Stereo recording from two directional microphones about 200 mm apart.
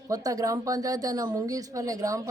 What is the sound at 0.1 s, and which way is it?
Speech, 20° right (ahead or behind).